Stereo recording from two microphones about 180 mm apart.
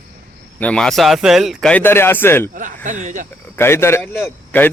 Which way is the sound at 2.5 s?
45° right (ahead or behind).